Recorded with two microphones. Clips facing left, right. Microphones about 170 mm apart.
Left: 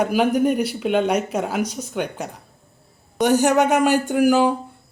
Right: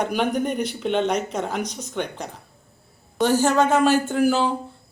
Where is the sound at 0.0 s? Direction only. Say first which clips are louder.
Left 5 dB; 5° left (ahead or behind).